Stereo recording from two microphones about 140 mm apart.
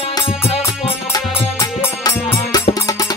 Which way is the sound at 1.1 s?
25° left (ahead or behind).